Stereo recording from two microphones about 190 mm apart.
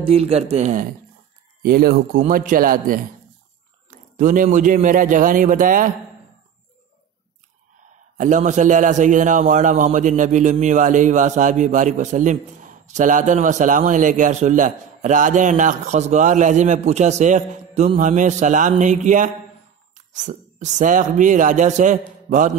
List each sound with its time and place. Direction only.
0.0 s a man's voice: 30° right (ahead or behind)
1.6 s a man's voice: 50° right (ahead or behind)
8.2 s a man's voice: 40° right (ahead or behind)